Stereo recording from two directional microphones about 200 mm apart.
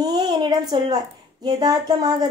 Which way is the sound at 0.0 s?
20° right (ahead or behind).